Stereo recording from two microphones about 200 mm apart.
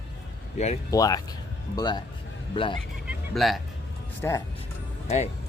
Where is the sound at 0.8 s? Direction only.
20° left (ahead or behind).